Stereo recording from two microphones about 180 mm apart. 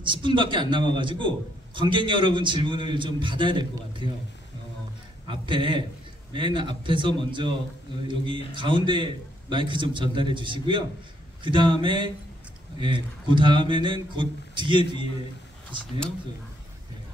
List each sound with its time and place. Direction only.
0.0 s a man's voice: 25° right (ahead or behind)
5.4 s a man's voice: 25° right (ahead or behind)